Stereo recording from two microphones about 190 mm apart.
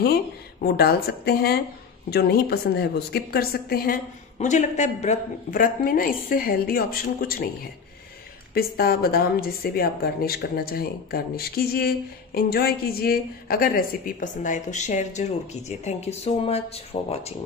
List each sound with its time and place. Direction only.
0.0 s a woman's voice: 55° left (ahead or behind)
8.5 s a woman's voice: 55° left (ahead or behind); by 17.4 s 30° left (ahead or behind)